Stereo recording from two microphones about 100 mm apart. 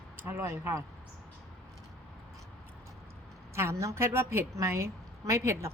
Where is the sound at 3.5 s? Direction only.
25° right (ahead or behind).